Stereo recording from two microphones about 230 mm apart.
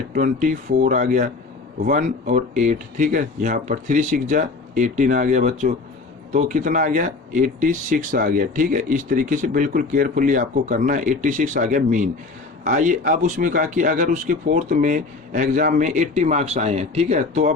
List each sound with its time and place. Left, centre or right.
0.1 s speech: right